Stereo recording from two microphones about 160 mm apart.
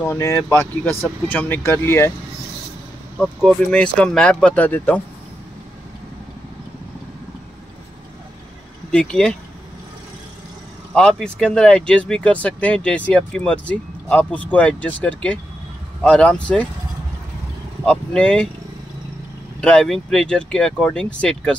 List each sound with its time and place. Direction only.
0.0 s speech: 15° left (ahead or behind)
3.2 s speech: 5° left (ahead or behind)
8.9 s speech: 5° left (ahead or behind)
11.0 s speech: 5° left (ahead or behind)
17.8 s speech: 5° left (ahead or behind)
19.6 s speech: 5° left (ahead or behind)